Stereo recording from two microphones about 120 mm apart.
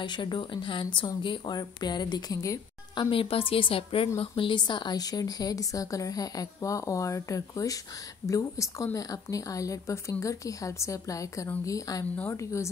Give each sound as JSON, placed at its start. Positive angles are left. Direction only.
{"t": 0.0, "sound": "speech", "side_deg": 40}
{"t": 3.1, "sound": "a woman's voice", "side_deg": 50}